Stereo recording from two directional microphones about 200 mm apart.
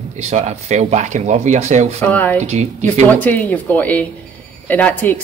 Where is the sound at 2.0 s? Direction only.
10° left (ahead or behind).